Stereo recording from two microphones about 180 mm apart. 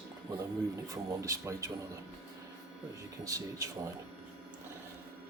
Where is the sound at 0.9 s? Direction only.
15° right (ahead or behind).